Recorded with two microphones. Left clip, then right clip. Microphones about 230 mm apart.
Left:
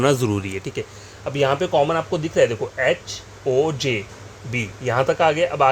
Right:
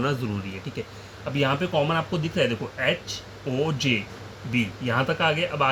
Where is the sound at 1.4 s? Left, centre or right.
Left.